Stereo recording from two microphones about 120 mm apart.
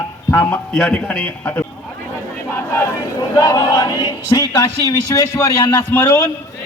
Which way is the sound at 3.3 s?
30° left (ahead or behind).